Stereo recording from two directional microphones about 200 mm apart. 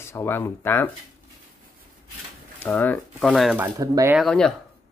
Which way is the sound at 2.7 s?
10° left (ahead or behind).